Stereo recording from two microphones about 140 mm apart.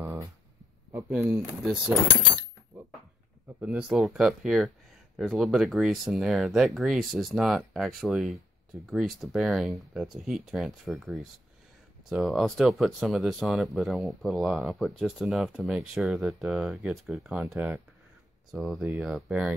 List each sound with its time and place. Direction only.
0.0 s a sound: 20° right (ahead or behind)
1.6 s speech: 5° right (ahead or behind)
3.6 s speech: 5° right (ahead or behind)